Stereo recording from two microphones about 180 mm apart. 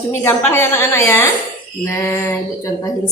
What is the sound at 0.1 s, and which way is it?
A woman's voice, 15° left (ahead or behind).